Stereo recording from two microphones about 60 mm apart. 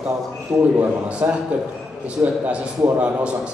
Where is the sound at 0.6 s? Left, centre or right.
Right.